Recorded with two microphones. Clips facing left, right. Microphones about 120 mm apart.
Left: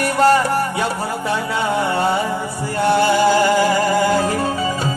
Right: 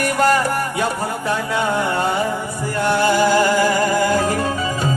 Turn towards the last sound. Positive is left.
turn(degrees=30)  # may be behind; listen again after turning